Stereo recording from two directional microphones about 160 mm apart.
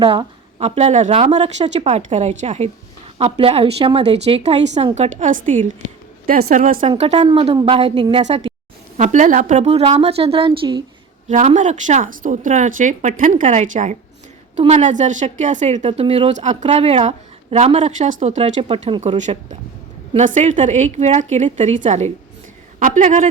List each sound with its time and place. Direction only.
0.0 s a woman's voice: 35° right (ahead or behind); by 6.6 s 60° right (ahead or behind)
6.8 s a woman's voice: 45° right (ahead or behind)
11.3 s speech: 50° right (ahead or behind)
18.9 s a woman's voice: 35° right (ahead or behind)
19.1 s speech: 50° right (ahead or behind)